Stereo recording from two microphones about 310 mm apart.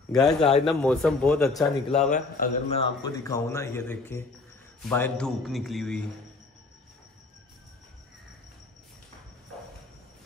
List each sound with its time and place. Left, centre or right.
0.4 s a man's voice: centre
0.7 s a man's voice: centre
2.0 s a man's voice: left; by 6.0 s centre